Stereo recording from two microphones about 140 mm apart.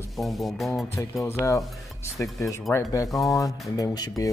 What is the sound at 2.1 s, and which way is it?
Speech, 20° left (ahead or behind).